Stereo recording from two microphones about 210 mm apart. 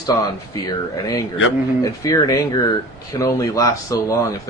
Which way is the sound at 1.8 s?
15° left (ahead or behind).